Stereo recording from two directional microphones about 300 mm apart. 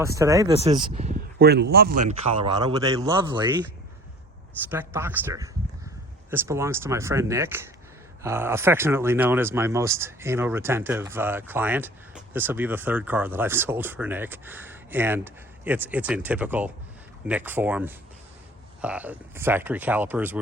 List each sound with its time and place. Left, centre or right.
0.0 s speech: centre
1.5 s speech: right; by 3.4 s centre
4.7 s speech: centre